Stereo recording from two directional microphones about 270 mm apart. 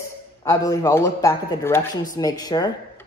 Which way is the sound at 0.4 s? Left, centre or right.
Centre.